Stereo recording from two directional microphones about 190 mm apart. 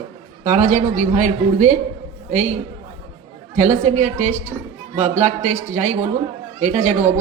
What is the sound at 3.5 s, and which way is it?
A woman's voice, 40° right (ahead or behind).